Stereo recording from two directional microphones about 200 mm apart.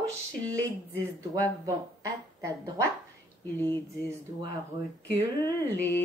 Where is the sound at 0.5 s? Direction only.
15° right (ahead or behind).